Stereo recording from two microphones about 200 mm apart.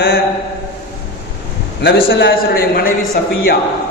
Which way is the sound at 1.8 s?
60° left (ahead or behind).